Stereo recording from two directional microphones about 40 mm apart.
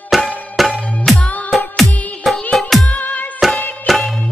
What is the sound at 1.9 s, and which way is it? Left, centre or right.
Music, left.